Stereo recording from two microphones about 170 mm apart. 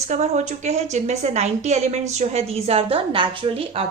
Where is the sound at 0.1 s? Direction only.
40° right (ahead or behind).